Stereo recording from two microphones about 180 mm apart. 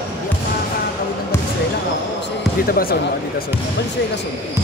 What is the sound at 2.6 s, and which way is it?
Speech, 55° left (ahead or behind).